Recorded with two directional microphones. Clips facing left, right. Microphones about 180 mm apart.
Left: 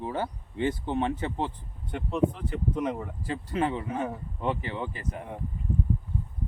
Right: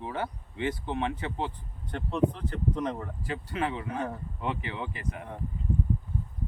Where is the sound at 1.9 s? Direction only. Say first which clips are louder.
Left 1 dB; 5° left (ahead or behind).